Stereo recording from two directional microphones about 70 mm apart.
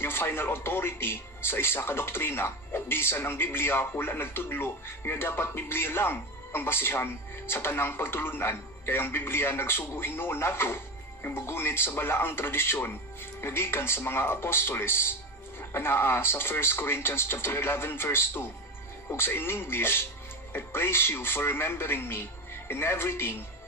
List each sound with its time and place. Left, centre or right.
0.0 s a man's voice: left